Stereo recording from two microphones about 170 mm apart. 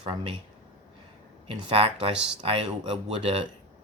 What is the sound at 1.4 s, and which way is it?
Speech, 30° right (ahead or behind).